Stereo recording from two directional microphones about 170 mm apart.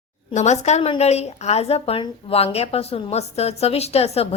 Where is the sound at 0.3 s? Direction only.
40° left (ahead or behind).